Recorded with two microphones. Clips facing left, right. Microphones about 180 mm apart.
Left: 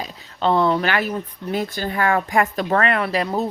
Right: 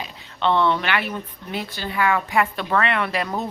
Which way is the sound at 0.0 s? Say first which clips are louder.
Left 2 dB; 40° left (ahead or behind).